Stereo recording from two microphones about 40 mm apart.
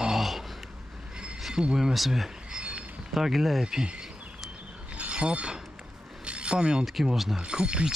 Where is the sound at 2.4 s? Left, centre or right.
Right.